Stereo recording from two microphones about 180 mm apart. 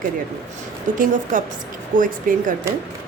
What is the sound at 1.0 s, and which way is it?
A woman's voice, 45° right (ahead or behind).